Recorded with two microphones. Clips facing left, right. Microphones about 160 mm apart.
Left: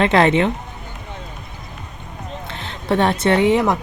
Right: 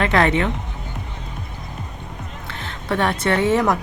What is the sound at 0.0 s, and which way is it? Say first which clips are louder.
Speech: left 3 dB; 25° left (ahead or behind).